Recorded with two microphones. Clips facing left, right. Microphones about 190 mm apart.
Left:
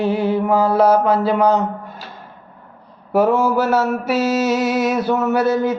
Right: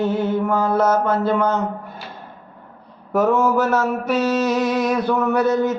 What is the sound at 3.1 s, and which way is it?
Mantra, 10° left (ahead or behind).